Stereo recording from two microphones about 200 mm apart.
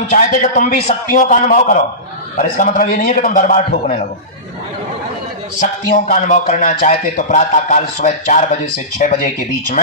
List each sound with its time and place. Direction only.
0.1 s speech: 40° left (ahead or behind)
5.9 s speech: 40° left (ahead or behind)